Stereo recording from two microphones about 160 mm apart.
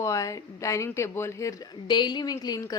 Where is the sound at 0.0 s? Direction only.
20° left (ahead or behind).